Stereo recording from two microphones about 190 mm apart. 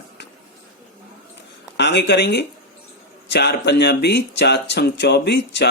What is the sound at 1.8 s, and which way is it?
Speech, 65° left (ahead or behind).